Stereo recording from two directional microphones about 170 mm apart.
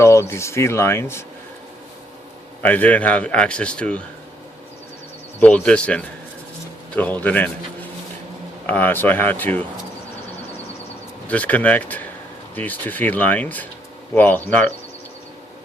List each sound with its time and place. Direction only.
0.0 s a man's voice: 15° left (ahead or behind)
2.6 s a man's voice: 10° left (ahead or behind)
5.4 s a man's voice: 10° left (ahead or behind)
8.6 s a man's voice: 10° left (ahead or behind)
11.3 s a man's voice: 10° left (ahead or behind)